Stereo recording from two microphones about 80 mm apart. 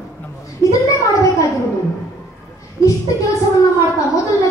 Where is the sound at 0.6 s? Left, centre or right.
Left.